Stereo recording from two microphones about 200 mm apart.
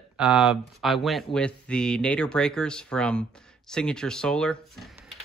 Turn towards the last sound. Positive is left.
turn(degrees=0)  # may be behind; listen again after turning